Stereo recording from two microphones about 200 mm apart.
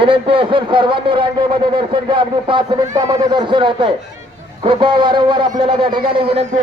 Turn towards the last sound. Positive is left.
turn(degrees=-25)  # may be behind; listen again after turning